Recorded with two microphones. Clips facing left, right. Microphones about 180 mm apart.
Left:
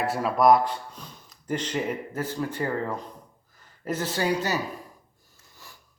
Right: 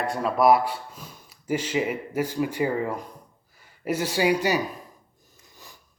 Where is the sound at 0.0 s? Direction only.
5° left (ahead or behind).